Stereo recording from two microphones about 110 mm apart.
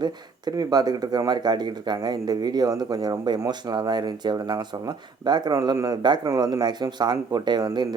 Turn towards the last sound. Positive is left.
turn(degrees=-40)  # may be behind; listen again after turning